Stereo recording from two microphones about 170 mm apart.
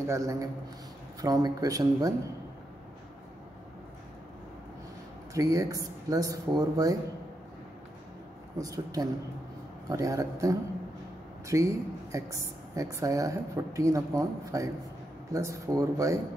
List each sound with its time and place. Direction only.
0.0 s a woman's voice: 20° right (ahead or behind)
5.3 s a woman's voice: 20° right (ahead or behind)
8.5 s a woman's voice: 20° right (ahead or behind)